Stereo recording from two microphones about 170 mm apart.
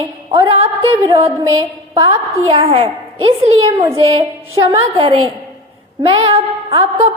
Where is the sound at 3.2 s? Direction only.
35° right (ahead or behind).